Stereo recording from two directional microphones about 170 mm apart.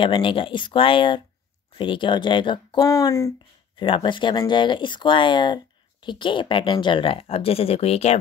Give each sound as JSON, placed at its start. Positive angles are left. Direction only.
{"t": 0.0, "sound": "speech", "side_deg": 30}